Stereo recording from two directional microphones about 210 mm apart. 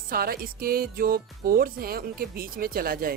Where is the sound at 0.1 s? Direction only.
45° right (ahead or behind).